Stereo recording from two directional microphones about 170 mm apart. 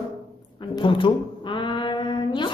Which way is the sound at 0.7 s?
30° left (ahead or behind).